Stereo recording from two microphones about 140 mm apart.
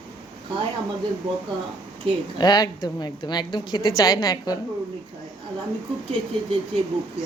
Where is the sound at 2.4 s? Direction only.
30° left (ahead or behind).